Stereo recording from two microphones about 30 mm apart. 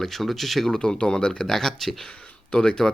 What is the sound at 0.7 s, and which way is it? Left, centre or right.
Speech, left.